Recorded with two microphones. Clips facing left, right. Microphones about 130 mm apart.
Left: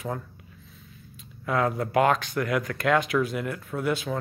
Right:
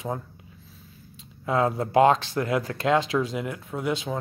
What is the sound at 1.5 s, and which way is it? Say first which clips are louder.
Speech: right 2 dB; 25° right (ahead or behind).